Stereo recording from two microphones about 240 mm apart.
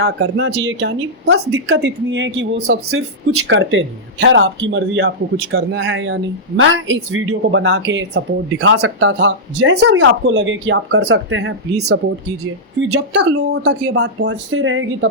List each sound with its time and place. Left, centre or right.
0.0 s a woman's voice: right